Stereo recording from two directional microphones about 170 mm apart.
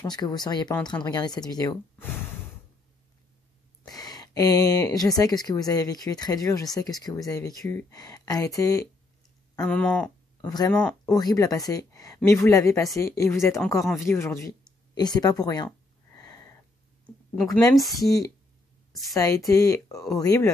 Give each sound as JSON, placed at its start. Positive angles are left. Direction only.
{"t": 0.0, "sound": "speech", "side_deg": 25}
{"t": 2.0, "sound": "snort", "side_deg": 15}
{"t": 3.8, "sound": "speech", "side_deg": 25}
{"t": 9.6, "sound": "speech", "side_deg": 5}
{"t": 11.1, "sound": "speech", "side_deg": 20}
{"t": 16.2, "sound": "a sound", "side_deg": 20}
{"t": 17.5, "sound": "speech", "side_deg": 20}
{"t": 17.7, "sound": "speech", "side_deg": 0}
{"t": 19.1, "sound": "speech", "side_deg": 20}